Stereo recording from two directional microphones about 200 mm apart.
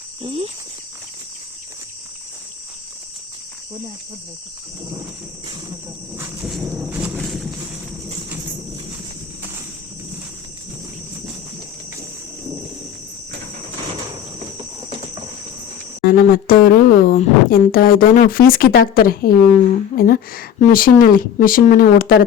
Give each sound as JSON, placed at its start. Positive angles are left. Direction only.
{"t": 0.2, "sound": "speech", "side_deg": -25}
{"t": 6.1, "sound": "insect", "side_deg": -15}
{"t": 6.5, "sound": "thunder", "side_deg": -5}
{"t": 14.8, "sound": "cricket", "side_deg": -25}
{"t": 16.0, "sound": "speech", "side_deg": 45}